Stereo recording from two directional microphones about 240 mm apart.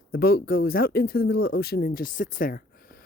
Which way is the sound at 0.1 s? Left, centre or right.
Left.